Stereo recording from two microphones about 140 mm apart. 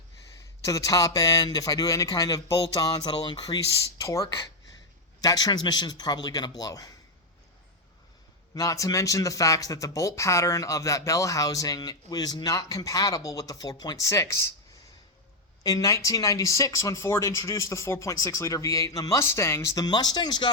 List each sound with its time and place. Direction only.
0.6 s speech: 25° left (ahead or behind)
8.5 s speech: 25° left (ahead or behind)
15.6 s speech: 25° left (ahead or behind)